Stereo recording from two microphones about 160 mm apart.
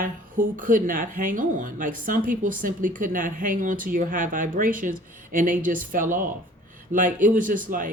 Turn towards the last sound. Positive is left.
turn(degrees=-55)  # may be behind; listen again after turning